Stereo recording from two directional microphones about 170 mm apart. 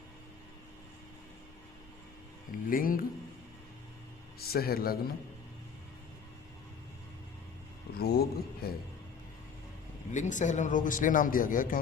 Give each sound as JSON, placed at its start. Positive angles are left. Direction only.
{"t": 2.5, "sound": "speech", "side_deg": 55}
{"t": 4.4, "sound": "speech", "side_deg": 65}
{"t": 7.9, "sound": "speech", "side_deg": 65}
{"t": 10.1, "sound": "a man's voice", "side_deg": 45}